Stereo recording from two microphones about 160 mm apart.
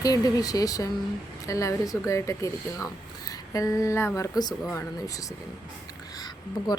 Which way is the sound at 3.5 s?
20° left (ahead or behind).